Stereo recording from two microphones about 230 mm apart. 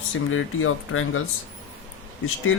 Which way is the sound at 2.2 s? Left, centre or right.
Left.